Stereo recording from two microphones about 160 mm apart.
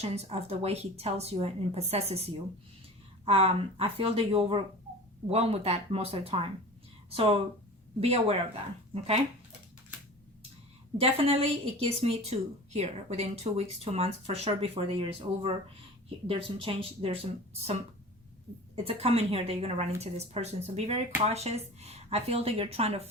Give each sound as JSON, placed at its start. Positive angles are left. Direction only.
{"t": 0.0, "sound": "a woman's voice", "side_deg": -40}
{"t": 11.0, "sound": "a woman's voice", "side_deg": -40}
{"t": 18.9, "sound": "a woman's voice", "side_deg": -35}